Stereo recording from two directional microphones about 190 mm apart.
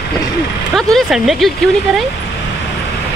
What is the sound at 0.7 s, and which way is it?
Speech, centre (ahead or behind).